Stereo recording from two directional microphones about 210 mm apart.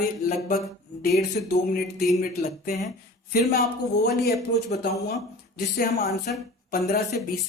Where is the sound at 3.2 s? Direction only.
45° left (ahead or behind).